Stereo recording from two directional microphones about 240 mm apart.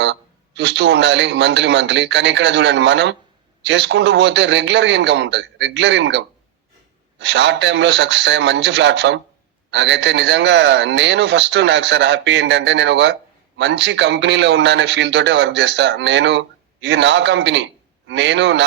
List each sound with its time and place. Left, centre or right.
0.0 s a man's voice: right